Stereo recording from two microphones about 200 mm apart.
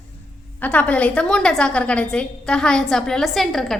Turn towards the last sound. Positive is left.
turn(degrees=0)  # may be behind; listen again after turning